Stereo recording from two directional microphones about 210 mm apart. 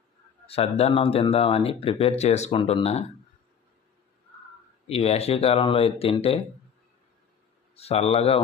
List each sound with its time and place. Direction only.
0.4 s speech: 30° left (ahead or behind)
4.9 s speech: 30° left (ahead or behind)
7.8 s speech: 30° left (ahead or behind)